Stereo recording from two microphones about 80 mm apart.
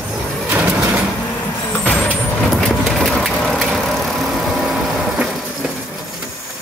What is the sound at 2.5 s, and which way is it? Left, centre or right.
Vehicle, centre.